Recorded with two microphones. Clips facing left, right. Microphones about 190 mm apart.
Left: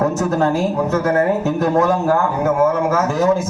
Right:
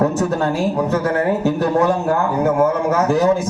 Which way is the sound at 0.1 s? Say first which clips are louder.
Even; 35° right (ahead or behind).